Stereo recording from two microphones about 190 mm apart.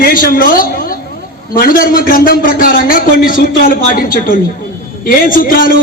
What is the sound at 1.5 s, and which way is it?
A man's voice, 50° left (ahead or behind).